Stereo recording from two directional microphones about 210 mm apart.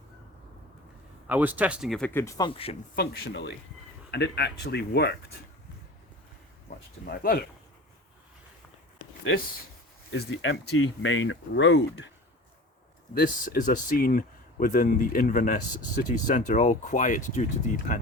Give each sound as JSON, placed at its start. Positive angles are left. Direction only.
{"t": 1.3, "sound": "speech", "side_deg": -5}
{"t": 2.5, "sound": "speech", "side_deg": 25}
{"t": 2.9, "sound": "speech", "side_deg": 50}
{"t": 7.0, "sound": "speech", "side_deg": 45}
{"t": 10.1, "sound": "speech", "side_deg": 65}
{"t": 13.1, "sound": "speech", "side_deg": 40}